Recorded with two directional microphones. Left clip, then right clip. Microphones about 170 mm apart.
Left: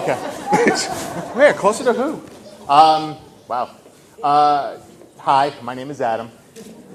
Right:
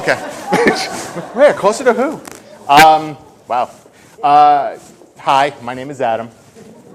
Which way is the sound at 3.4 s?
40° right (ahead or behind).